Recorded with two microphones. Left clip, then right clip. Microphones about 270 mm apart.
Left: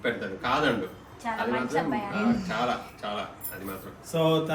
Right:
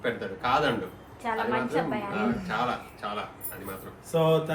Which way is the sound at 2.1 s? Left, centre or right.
Centre.